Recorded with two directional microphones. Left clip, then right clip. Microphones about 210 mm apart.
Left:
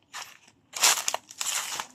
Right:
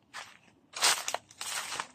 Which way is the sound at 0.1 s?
50° left (ahead or behind).